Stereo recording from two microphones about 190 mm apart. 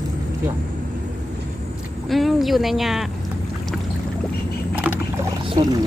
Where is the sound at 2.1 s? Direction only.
Centre (ahead or behind).